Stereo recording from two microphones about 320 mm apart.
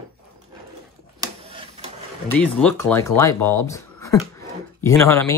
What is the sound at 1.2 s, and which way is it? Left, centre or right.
Printer, centre.